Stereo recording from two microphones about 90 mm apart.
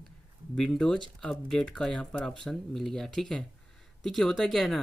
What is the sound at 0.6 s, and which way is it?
Speech, 5° left (ahead or behind).